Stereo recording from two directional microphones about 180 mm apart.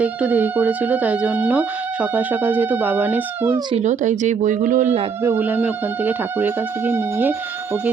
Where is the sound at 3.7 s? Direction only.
40° right (ahead or behind).